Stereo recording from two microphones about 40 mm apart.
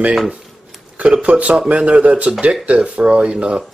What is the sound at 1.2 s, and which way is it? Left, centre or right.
A man's voice, right.